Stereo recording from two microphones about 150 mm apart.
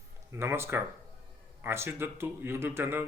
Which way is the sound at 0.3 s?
15° right (ahead or behind).